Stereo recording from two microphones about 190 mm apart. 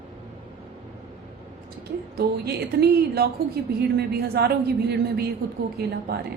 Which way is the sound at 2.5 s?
60° right (ahead or behind).